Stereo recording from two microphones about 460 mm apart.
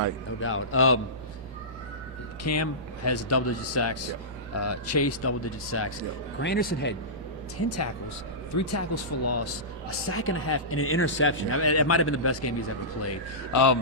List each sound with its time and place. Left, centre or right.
0.3 s speech: left
2.4 s speech: left
8.5 s speech: left
13.5 s speech: left